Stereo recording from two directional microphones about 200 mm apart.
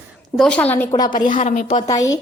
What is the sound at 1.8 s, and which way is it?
Speech, 20° left (ahead or behind).